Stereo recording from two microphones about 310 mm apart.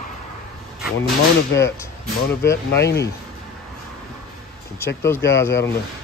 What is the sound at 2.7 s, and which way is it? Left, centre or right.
Speech, left.